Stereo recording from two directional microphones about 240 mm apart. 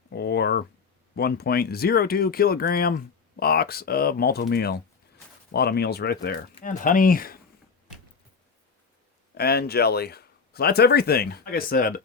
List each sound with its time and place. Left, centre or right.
0.1 s a sound: left
1.1 s speech: left
9.4 s speech: left